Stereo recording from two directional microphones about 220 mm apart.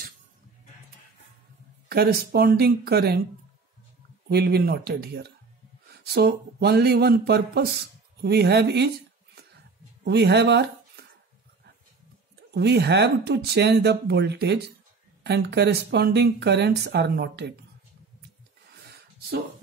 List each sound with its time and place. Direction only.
1.9 s speech: 45° right (ahead or behind)
4.3 s speech: 45° right (ahead or behind)
12.4 s speech: 50° right (ahead or behind)
18.8 s a sound: 45° right (ahead or behind)